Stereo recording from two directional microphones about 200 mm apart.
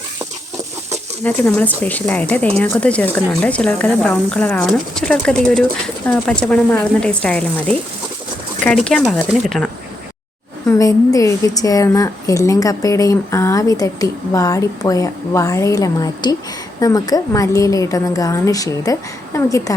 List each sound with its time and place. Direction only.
1.2 s a woman's voice: 5° left (ahead or behind)
10.7 s a woman's voice: 15° left (ahead or behind)